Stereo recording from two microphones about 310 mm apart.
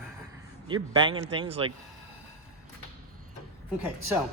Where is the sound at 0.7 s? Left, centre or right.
Centre.